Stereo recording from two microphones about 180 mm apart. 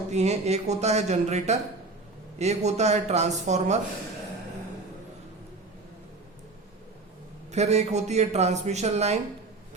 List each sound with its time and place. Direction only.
0.1 s a man's voice: 40° right (ahead or behind)
7.5 s a man's voice: 40° right (ahead or behind)